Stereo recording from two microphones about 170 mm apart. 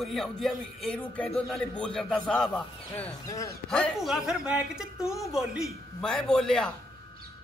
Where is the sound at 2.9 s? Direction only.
20° left (ahead or behind).